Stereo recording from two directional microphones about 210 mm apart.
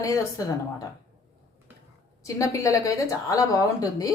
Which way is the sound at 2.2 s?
15° left (ahead or behind).